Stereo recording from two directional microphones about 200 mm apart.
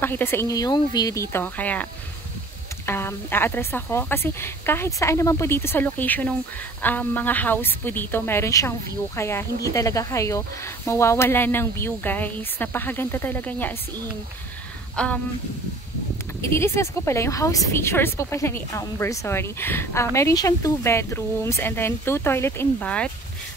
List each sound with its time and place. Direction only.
0.0 s a woman's voice: 10° left (ahead or behind)
2.9 s a woman's voice: 10° left (ahead or behind)
15.0 s speech: 5° left (ahead or behind)
16.5 s a woman's voice: 15° left (ahead or behind)